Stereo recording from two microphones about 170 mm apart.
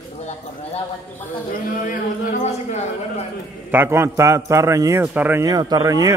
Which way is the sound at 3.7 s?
15° right (ahead or behind).